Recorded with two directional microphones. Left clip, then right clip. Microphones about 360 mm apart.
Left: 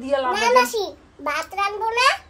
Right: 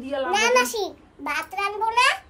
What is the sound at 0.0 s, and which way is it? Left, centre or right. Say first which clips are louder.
A child's voice: left 2 dB; centre.